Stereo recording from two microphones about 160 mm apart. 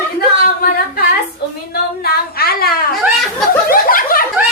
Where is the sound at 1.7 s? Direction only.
75° left (ahead or behind).